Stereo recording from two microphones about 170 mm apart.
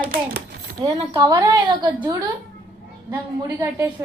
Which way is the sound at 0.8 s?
25° right (ahead or behind).